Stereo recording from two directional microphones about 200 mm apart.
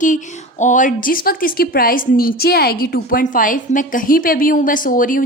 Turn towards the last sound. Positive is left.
turn(degrees=45)  # may be behind; listen again after turning